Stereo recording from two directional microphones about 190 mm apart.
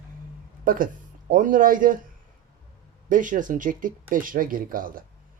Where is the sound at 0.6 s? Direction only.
45° right (ahead or behind).